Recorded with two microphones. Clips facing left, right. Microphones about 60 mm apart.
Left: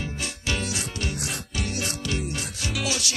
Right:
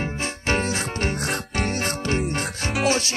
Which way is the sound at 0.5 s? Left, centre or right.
Right.